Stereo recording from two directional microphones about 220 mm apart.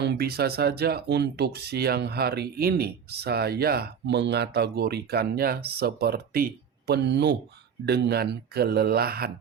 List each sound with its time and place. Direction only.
0.0 s speech: 50° right (ahead or behind)